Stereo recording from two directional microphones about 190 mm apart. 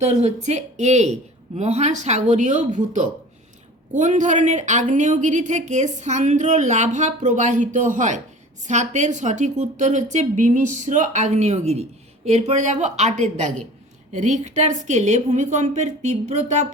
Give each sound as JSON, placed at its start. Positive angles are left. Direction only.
{"t": 0.0, "sound": "a woman's voice", "side_deg": -35}